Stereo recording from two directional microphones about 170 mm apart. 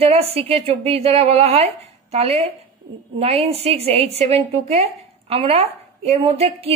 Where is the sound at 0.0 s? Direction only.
35° right (ahead or behind).